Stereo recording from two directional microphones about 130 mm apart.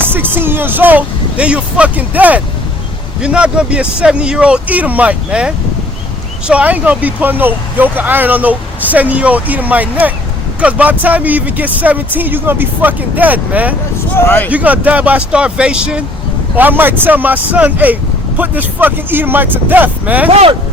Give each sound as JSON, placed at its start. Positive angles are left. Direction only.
{"t": 0.0, "sound": "speech", "side_deg": -15}
{"t": 14.2, "sound": "speech", "side_deg": 15}
{"t": 14.5, "sound": "speech", "side_deg": -10}